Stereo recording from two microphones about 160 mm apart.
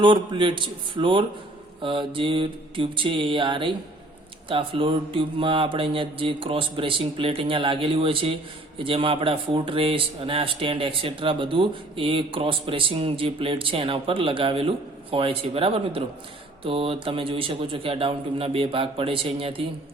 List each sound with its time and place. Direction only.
0.0 s speech: 30° right (ahead or behind)